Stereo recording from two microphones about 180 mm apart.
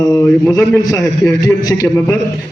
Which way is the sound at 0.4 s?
15° left (ahead or behind).